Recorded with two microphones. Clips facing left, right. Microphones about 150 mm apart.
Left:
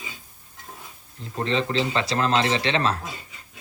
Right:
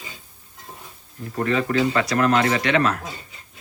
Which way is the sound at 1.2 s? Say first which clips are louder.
Right 3 dB; 25° left (ahead or behind).